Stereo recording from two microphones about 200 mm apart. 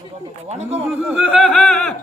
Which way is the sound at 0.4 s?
35° right (ahead or behind).